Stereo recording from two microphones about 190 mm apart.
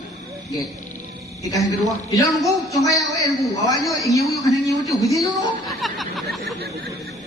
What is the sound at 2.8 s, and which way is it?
A man's voice, 20° left (ahead or behind).